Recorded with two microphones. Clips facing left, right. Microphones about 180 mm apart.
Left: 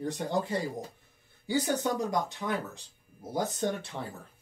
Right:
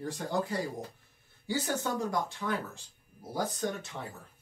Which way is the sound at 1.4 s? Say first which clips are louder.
Left 4 dB; 15° left (ahead or behind).